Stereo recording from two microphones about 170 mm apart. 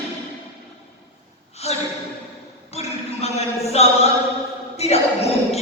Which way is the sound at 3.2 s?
40° left (ahead or behind).